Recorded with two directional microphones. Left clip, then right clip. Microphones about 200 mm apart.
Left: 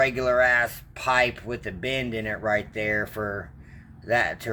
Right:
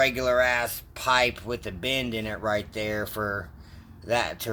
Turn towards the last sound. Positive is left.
turn(degrees=-15)  # may be behind; listen again after turning